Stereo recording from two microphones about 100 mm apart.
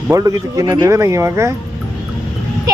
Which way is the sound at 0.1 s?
35° right (ahead or behind).